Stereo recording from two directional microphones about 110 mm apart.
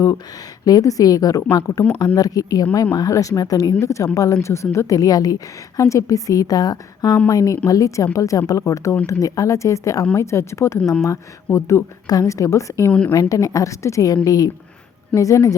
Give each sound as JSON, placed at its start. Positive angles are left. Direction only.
{"t": 0.6, "sound": "a woman's voice", "side_deg": 35}
{"t": 12.9, "sound": "a woman's voice", "side_deg": 10}
{"t": 13.1, "sound": "a woman's voice", "side_deg": 30}